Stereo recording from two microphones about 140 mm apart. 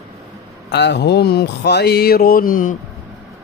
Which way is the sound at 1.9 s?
90° left.